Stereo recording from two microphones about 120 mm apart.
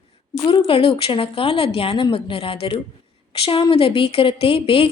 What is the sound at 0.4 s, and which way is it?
A woman's voice, 50° left (ahead or behind).